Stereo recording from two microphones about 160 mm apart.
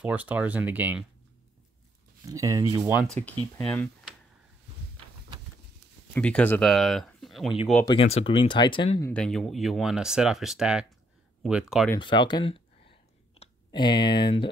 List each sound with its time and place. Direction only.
0.0 s speech: 10° right (ahead or behind)
2.2 s speech: 20° right (ahead or behind)
2.8 s speech: 10° right (ahead or behind)
3.1 s speech: 10° left (ahead or behind)
6.1 s speech: 10° left (ahead or behind)
7.8 s speech: 35° left (ahead or behind)
9.1 s speech: 5° left (ahead or behind)
12.0 s speech: 30° left (ahead or behind)